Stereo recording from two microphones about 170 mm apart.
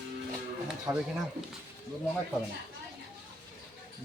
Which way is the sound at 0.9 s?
20° right (ahead or behind).